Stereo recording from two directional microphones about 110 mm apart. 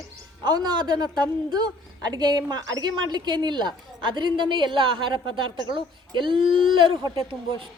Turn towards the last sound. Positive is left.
turn(degrees=-50)  # may be behind; listen again after turning